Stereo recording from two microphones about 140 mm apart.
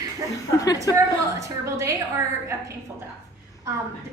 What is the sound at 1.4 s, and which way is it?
A woman's voice, 20° right (ahead or behind).